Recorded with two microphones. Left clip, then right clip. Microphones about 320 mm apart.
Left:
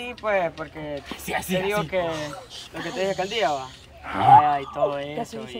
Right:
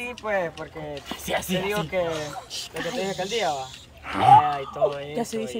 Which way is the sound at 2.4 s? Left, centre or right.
Right.